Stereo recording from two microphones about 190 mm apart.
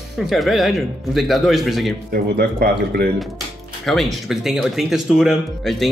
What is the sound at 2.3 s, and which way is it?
Speech, 55° right (ahead or behind).